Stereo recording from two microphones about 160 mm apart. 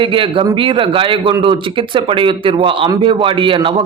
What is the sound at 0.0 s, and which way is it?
A man's voice, 30° right (ahead or behind).